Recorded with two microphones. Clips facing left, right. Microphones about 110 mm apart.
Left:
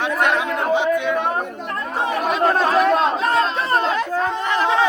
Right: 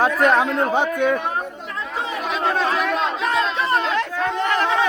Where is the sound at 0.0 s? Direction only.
40° right (ahead or behind).